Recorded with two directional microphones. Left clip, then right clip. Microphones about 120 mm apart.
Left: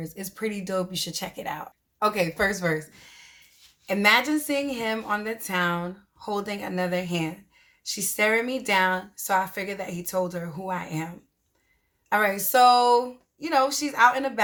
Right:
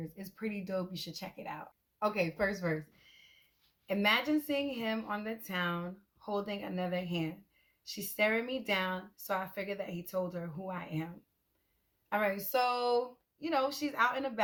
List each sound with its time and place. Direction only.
0.0 s a woman's voice: 25° left (ahead or behind)